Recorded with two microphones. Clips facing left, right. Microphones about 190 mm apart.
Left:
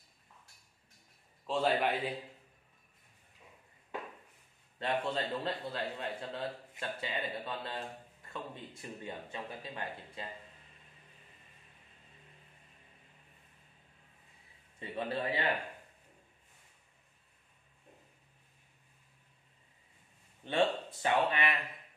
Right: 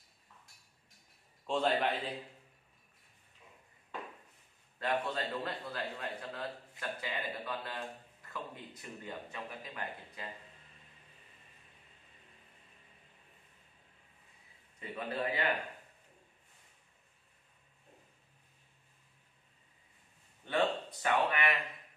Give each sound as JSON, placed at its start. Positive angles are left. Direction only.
{"t": 1.4, "sound": "a man's voice", "side_deg": 5}
{"t": 4.7, "sound": "a man's voice", "side_deg": 25}
{"t": 14.8, "sound": "a man's voice", "side_deg": 30}
{"t": 20.4, "sound": "speech", "side_deg": 25}